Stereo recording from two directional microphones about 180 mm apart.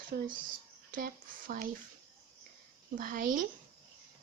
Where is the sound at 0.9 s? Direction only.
50° right (ahead or behind).